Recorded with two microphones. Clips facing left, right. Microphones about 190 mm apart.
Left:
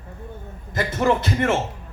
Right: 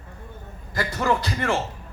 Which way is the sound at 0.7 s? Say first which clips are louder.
Left 3 dB; 20° left (ahead or behind).